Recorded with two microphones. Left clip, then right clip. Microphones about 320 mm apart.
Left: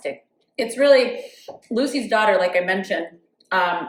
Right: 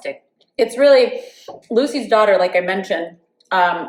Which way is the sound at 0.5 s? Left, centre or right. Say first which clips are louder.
Right 4 dB; centre.